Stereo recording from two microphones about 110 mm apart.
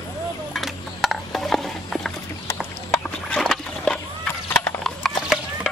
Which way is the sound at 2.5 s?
20° left (ahead or behind).